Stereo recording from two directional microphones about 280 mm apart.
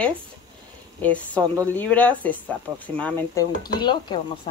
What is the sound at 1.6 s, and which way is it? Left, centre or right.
Speech, centre.